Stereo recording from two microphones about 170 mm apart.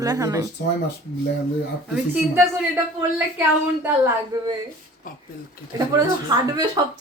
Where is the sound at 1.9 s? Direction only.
5° right (ahead or behind).